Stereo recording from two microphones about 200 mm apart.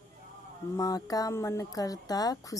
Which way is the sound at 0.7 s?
15° left (ahead or behind).